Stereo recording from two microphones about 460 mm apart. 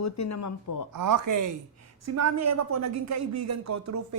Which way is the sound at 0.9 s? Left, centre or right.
Right.